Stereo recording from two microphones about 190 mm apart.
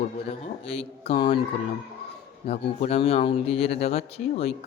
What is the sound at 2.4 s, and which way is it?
Speech, 30° left (ahead or behind).